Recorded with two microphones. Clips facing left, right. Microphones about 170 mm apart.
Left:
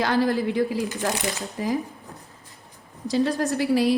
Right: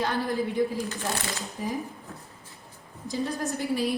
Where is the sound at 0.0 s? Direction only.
90° left.